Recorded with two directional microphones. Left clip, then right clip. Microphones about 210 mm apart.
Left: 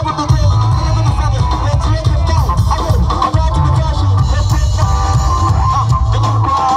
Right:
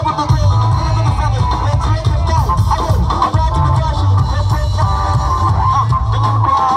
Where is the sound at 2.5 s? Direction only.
50° left (ahead or behind).